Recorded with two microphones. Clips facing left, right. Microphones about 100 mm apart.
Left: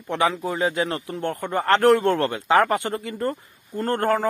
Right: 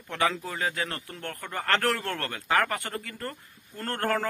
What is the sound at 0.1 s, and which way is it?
Speech, 15° left (ahead or behind).